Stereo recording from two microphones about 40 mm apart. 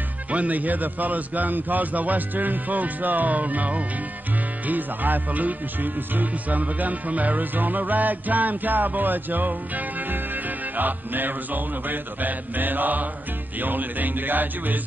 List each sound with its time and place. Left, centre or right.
0.3 s music: right